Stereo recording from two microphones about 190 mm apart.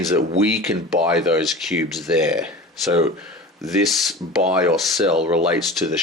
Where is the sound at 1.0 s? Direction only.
5° right (ahead or behind).